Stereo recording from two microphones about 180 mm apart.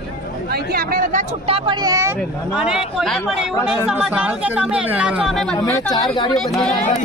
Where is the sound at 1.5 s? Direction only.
25° right (ahead or behind).